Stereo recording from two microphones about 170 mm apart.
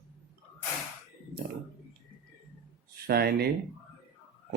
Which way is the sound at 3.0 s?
65° right (ahead or behind).